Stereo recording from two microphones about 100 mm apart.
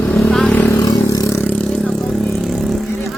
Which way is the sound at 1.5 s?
5° left (ahead or behind).